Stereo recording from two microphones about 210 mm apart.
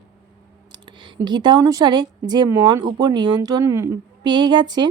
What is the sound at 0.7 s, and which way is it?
A woman's voice, 20° right (ahead or behind).